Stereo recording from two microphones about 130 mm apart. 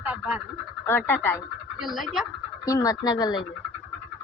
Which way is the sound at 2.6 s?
25° left (ahead or behind).